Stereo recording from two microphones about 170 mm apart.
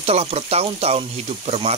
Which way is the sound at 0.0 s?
35° right (ahead or behind).